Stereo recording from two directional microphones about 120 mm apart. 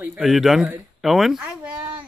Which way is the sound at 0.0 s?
5° right (ahead or behind).